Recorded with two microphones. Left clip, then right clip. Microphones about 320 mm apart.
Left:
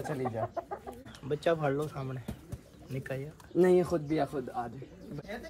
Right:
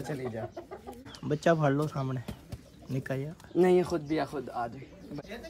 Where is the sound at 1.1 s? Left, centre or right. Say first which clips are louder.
Right 3 dB; right.